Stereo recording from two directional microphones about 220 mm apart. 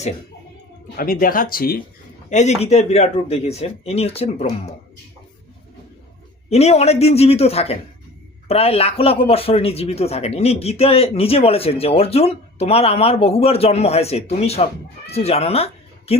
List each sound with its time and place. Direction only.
0.9 s speech: 40° left (ahead or behind)
2.3 s speech: 30° left (ahead or behind)
6.5 s speech: 30° left (ahead or behind)